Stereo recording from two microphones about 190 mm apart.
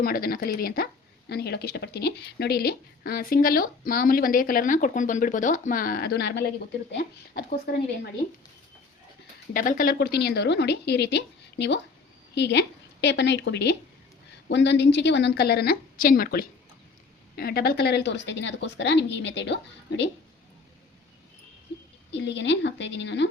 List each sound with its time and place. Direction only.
0.0 s speech: 50° left (ahead or behind)
9.5 s a woman's voice: 45° left (ahead or behind); by 19.5 s 70° left (ahead or behind)
22.2 s speech: 70° left (ahead or behind)